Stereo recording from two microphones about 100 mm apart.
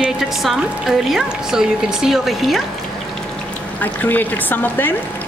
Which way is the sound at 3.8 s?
20° left (ahead or behind).